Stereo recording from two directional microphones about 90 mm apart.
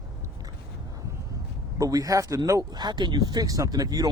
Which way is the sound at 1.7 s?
45° right (ahead or behind).